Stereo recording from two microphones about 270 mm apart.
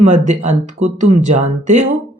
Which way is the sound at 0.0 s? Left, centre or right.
Right.